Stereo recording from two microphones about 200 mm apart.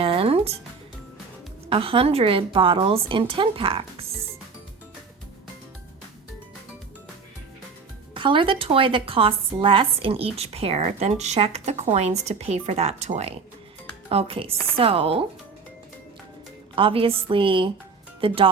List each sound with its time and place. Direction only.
0.0 s music: 30° right (ahead or behind)
1.7 s a woman's voice: 30° right (ahead or behind)
8.1 s a woman's voice: 25° right (ahead or behind)
16.7 s a woman's voice: 25° right (ahead or behind)